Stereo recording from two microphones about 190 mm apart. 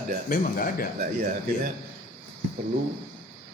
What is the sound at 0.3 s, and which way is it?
Speech, 50° left (ahead or behind).